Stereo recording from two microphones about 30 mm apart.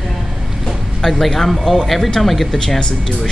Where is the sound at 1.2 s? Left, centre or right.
Centre.